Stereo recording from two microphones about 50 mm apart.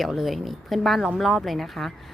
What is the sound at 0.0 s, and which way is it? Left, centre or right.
Speech, centre.